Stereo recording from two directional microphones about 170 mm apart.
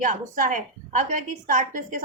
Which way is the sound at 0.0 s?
50° right (ahead or behind).